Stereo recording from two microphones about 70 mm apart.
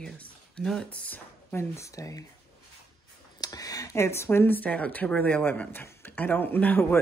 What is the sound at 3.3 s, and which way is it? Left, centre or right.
Speech, left.